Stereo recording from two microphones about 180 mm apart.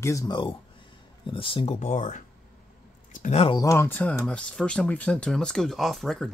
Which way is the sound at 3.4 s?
25° left (ahead or behind).